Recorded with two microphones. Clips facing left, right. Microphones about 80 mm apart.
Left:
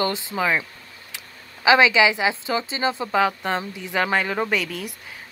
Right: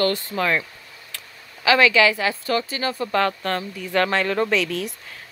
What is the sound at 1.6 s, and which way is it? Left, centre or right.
Speech, centre.